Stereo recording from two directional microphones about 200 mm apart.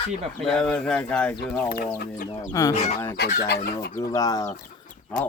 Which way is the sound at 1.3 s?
50° left (ahead or behind).